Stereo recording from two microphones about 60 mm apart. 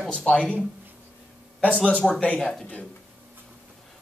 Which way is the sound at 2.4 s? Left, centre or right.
Centre.